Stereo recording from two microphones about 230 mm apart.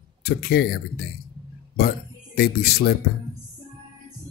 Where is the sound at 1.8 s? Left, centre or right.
Left.